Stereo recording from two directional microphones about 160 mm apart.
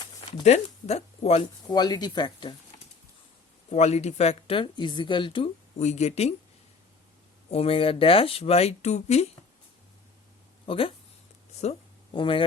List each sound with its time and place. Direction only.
0.4 s speech: 40° left (ahead or behind)
1.7 s speech: 25° left (ahead or behind)
3.7 s speech: 45° left (ahead or behind)
5.8 s speech: 45° left (ahead or behind)
7.5 s speech: 35° left (ahead or behind)
10.7 s speech: 35° left (ahead or behind)
12.1 s speech: 30° left (ahead or behind)